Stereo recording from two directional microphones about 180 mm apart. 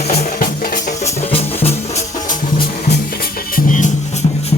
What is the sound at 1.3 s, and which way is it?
Music, 35° left (ahead or behind).